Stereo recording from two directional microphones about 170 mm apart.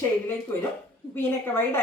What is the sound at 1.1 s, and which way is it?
Speech, 15° left (ahead or behind).